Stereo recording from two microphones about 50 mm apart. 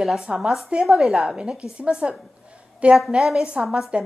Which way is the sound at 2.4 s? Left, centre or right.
Right.